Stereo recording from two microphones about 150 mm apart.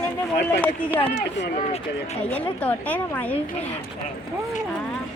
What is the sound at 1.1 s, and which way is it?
Speech, 45° left (ahead or behind).